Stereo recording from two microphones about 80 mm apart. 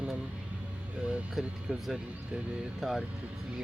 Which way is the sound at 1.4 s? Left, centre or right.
Centre.